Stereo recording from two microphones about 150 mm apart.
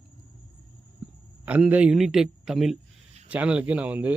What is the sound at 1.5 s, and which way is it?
A man's voice, 10° right (ahead or behind).